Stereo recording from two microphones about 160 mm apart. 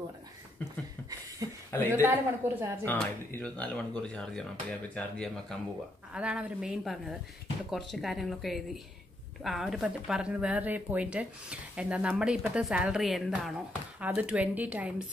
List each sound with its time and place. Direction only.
1.4 s a sound: 25° right (ahead or behind)
1.9 s speech: 15° right (ahead or behind)
2.8 s a woman's voice: 10° left (ahead or behind); by 15.0 s 10° right (ahead or behind)